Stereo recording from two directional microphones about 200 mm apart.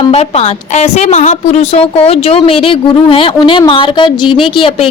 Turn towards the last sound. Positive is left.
turn(degrees=25)  # may be behind; listen again after turning